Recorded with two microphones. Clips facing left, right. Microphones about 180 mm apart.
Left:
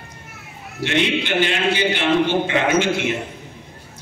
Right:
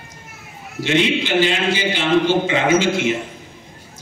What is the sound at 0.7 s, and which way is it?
A man's voice, 60° left (ahead or behind).